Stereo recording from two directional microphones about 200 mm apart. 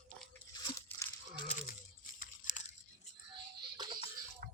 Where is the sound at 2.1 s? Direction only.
40° left (ahead or behind).